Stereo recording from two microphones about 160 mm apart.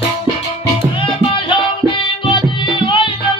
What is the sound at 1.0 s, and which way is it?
Music, 30° left (ahead or behind).